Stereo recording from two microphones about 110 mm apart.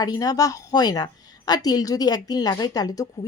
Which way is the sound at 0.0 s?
35° left (ahead or behind).